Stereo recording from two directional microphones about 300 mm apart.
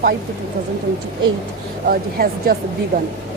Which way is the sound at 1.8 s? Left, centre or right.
Right.